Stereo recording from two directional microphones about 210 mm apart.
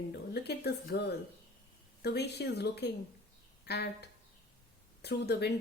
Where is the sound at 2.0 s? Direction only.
50° left (ahead or behind).